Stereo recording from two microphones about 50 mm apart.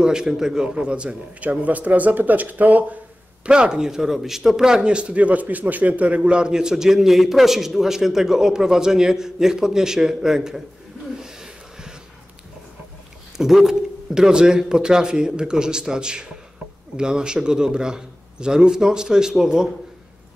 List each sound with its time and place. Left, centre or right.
0.0 s a man's voice: centre; by 3.0 s right
3.4 s speech: centre
11.1 s a sound: centre
13.4 s speech: centre